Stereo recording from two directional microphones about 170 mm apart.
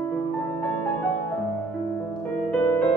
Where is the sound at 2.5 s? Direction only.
5° left (ahead or behind).